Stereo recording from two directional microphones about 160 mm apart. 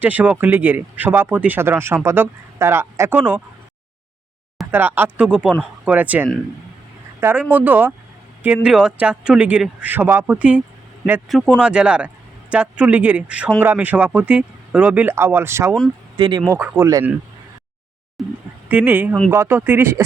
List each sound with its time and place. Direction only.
0.0 s speech: 10° right (ahead or behind)
4.7 s speech: 10° right (ahead or behind)
16.1 s speech: 25° right (ahead or behind)
16.5 s speech: 15° right (ahead or behind)
18.2 s a sound: centre (ahead or behind)
18.7 s speech: 10° right (ahead or behind)